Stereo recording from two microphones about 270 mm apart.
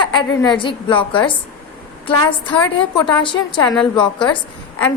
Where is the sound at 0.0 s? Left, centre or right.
Centre.